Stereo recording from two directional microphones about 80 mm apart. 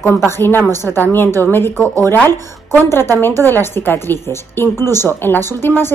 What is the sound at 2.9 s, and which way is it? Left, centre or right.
A woman's voice, left.